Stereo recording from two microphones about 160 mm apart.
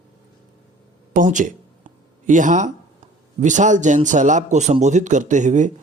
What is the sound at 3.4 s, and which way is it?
Speech, 50° right (ahead or behind).